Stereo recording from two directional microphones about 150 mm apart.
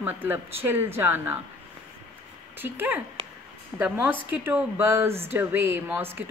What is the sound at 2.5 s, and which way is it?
A woman's voice, 15° right (ahead or behind).